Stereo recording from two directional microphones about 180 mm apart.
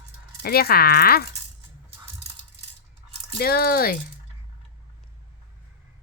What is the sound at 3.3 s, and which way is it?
Speech, 55° left (ahead or behind).